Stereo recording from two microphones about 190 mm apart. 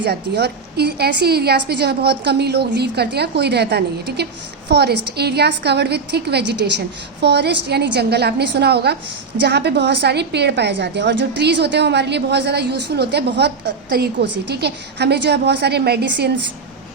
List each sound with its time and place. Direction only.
0.0 s a woman's voice: 60° right (ahead or behind)